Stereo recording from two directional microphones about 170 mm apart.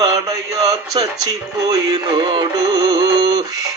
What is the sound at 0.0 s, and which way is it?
Speech, 20° right (ahead or behind).